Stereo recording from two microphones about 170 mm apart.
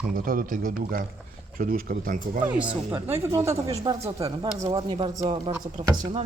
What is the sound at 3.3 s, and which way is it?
Speech, 15° right (ahead or behind).